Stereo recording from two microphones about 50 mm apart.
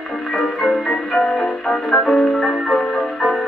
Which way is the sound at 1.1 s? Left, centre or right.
Left.